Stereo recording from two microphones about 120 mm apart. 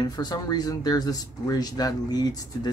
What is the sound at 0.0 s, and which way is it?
Speech, 35° left (ahead or behind).